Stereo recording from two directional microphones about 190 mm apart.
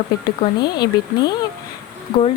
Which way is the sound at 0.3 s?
20° left (ahead or behind).